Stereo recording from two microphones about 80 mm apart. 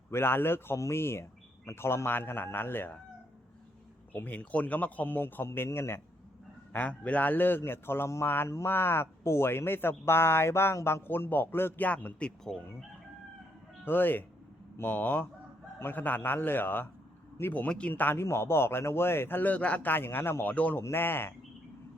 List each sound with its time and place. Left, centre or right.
0.1 s a man's voice: left
4.1 s a man's voice: left
6.7 s a man's voice: centre
13.8 s a man's voice: left